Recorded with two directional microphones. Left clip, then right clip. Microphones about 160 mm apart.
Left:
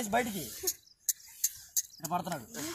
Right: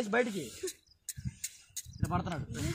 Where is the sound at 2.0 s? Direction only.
15° left (ahead or behind).